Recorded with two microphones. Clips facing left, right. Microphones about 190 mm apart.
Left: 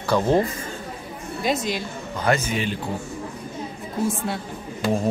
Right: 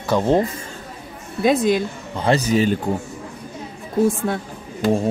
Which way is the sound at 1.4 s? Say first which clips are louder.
Right 7 dB; 50° right (ahead or behind).